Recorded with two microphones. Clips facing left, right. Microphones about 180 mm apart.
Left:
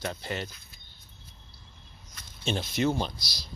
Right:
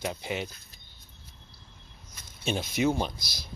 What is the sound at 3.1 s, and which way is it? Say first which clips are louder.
Speech: right 1 dB; 50° right (ahead or behind).